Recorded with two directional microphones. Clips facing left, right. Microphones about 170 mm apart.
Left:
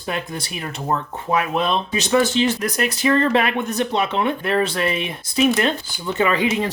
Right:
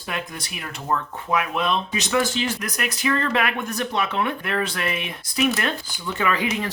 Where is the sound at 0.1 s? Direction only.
30° left (ahead or behind).